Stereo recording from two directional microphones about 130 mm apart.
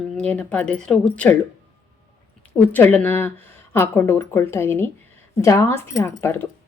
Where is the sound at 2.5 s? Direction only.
15° left (ahead or behind).